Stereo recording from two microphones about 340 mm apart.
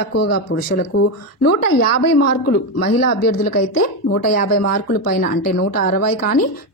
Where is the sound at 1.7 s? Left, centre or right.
Left.